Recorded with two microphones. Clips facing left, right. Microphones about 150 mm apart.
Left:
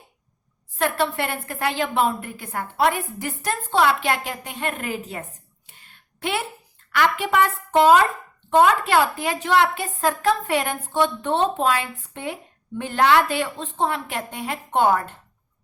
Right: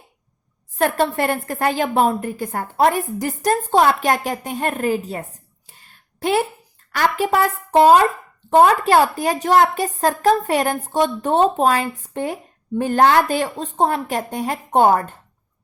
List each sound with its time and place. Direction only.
0.8 s a woman's voice: 45° right (ahead or behind)
5.6 s a sound: 40° right (ahead or behind)
6.9 s a woman's voice: 40° right (ahead or behind)